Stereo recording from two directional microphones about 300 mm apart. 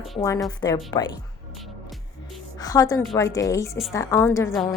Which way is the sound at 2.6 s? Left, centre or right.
Centre.